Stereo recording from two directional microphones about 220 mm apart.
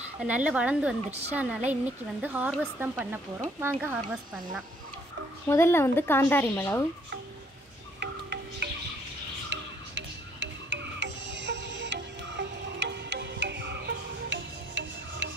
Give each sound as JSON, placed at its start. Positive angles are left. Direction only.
{"t": 0.2, "sound": "speech", "side_deg": -5}
{"t": 5.5, "sound": "a woman's voice", "side_deg": 10}
{"t": 8.0, "sound": "music", "side_deg": -50}